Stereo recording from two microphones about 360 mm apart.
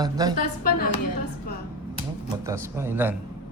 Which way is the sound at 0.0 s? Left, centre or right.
Centre.